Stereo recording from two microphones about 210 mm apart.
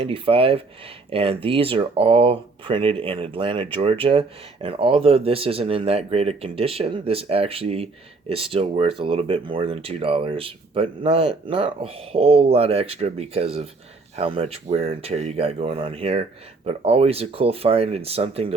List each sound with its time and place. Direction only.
0.0 s speech: 25° right (ahead or behind)